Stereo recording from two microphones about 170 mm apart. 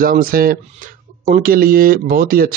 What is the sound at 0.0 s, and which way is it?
Speech, 55° right (ahead or behind).